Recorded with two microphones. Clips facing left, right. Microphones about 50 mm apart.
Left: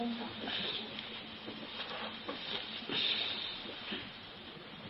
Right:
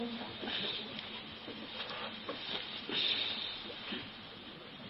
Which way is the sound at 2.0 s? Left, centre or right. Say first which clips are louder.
Even; centre.